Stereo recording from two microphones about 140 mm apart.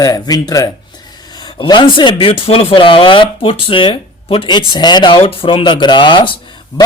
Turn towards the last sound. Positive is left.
turn(degrees=35)  # may be behind; listen again after turning